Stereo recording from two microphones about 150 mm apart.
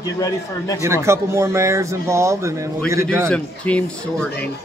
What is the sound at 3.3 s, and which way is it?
Speech, 10° left (ahead or behind).